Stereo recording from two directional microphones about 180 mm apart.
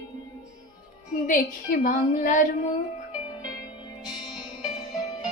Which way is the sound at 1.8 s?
45° left (ahead or behind).